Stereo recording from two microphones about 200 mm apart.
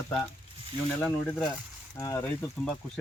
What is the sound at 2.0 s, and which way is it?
Speech, 15° left (ahead or behind).